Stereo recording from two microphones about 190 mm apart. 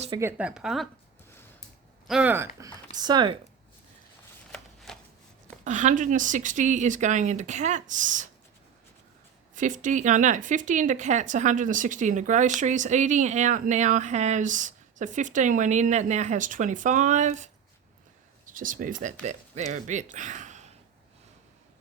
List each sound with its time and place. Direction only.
0.2 s speech: 10° right (ahead or behind)
2.0 s speech: 5° right (ahead or behind)
2.9 s speech: 20° right (ahead or behind)
4.5 s shuffling cards: centre (ahead or behind)
5.6 s speech: 40° right (ahead or behind)
9.6 s speech: 40° right (ahead or behind)